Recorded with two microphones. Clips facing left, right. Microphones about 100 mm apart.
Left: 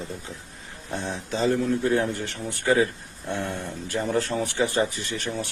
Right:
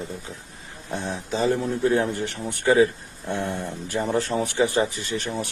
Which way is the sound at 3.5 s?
5° right (ahead or behind).